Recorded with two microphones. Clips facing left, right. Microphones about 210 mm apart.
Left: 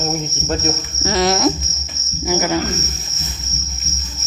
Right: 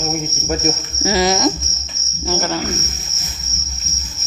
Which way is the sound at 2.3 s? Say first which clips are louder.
Left 3 dB; 15° left (ahead or behind).